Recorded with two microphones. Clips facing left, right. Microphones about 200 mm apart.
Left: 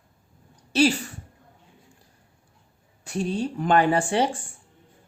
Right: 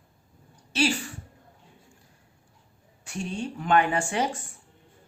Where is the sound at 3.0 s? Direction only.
35° left (ahead or behind).